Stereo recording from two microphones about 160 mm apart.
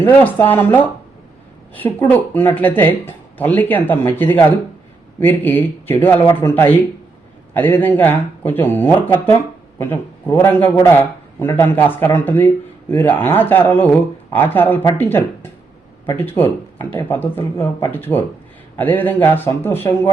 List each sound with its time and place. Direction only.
0.0 s speech: 10° left (ahead or behind)